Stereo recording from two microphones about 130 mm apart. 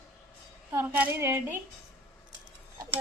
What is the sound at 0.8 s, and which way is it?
Speech, 15° right (ahead or behind).